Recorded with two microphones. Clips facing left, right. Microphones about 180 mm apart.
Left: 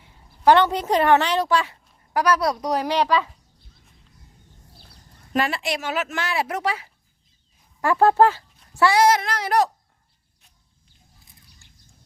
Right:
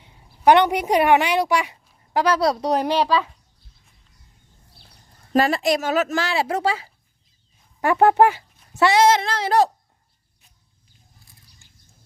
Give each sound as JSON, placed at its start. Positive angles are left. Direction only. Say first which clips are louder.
{"t": 0.0, "sound": "a woman's voice", "louder": "right 1 dB", "side_deg": -15}
{"t": 2.1, "sound": "a woman's voice", "louder": "right 2 dB", "side_deg": -25}
{"t": 2.9, "sound": "speech", "louder": "right 1 dB", "side_deg": -5}
{"t": 5.3, "sound": "a child's voice", "louder": "right 6 dB", "side_deg": -40}